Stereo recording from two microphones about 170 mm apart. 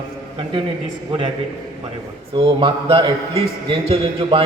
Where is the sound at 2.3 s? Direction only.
30° right (ahead or behind).